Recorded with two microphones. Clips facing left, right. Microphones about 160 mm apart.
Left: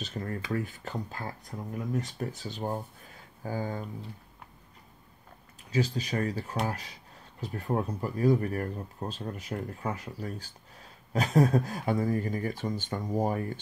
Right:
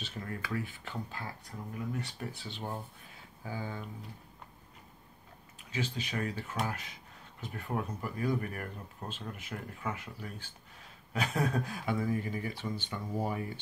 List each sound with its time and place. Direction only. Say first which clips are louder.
0.0 s a sound: left 6 dB; 45° left (ahead or behind)
0.5 s speech: left 5 dB; 40° left (ahead or behind)
5.7 s speech: left 7 dB; 40° left (ahead or behind)